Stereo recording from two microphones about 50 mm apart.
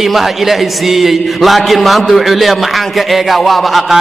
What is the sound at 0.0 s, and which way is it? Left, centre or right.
A man's voice, centre.